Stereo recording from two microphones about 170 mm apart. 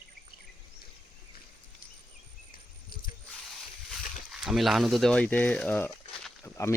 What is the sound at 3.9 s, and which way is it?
Speech, centre (ahead or behind).